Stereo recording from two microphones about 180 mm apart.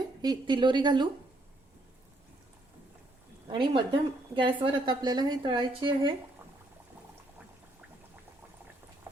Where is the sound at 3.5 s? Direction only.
30° right (ahead or behind).